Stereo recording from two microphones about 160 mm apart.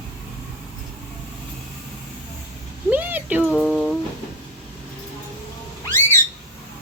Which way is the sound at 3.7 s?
5° left (ahead or behind).